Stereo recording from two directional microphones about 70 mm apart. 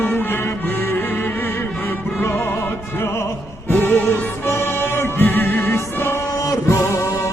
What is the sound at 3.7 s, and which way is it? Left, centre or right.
Music, left.